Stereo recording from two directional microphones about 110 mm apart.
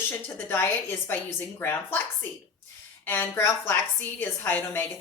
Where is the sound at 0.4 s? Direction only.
20° left (ahead or behind).